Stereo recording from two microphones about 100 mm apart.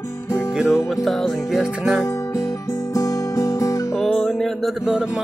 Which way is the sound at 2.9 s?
35° left (ahead or behind).